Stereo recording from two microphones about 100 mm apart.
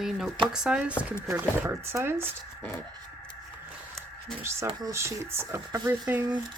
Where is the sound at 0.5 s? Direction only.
10° right (ahead or behind).